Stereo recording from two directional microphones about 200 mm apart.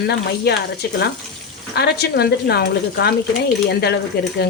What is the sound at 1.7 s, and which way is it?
Speech, 55° left (ahead or behind).